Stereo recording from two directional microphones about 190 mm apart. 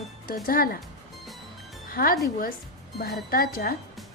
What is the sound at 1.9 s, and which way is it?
Speech, 50° left (ahead or behind).